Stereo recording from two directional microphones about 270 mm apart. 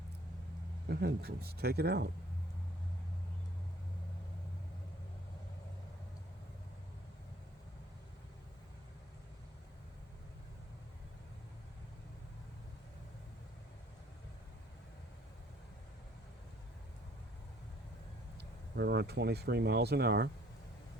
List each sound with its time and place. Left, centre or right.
0.9 s speech: right
18.3 s speech: right